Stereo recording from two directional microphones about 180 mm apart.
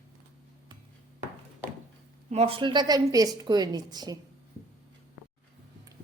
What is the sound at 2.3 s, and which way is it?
A woman's voice, 35° right (ahead or behind).